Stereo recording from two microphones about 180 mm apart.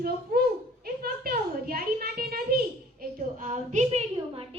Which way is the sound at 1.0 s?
55° right (ahead or behind).